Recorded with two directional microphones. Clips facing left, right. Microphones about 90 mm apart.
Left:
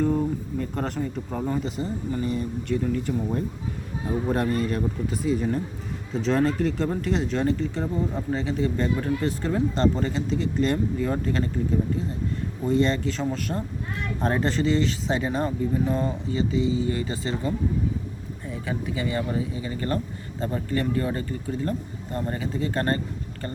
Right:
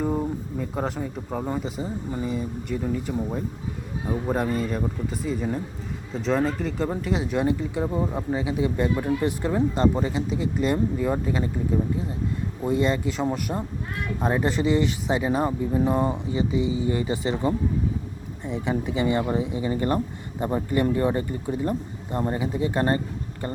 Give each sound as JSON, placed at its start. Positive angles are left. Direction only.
{"t": 0.0, "sound": "speech", "side_deg": -15}
{"t": 12.6, "sound": "speech", "side_deg": -10}